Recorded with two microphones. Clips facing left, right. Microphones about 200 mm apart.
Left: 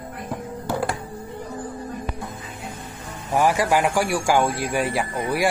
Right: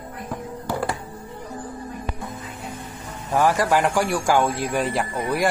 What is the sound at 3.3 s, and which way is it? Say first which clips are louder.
A man's voice: even; 10° left (ahead or behind).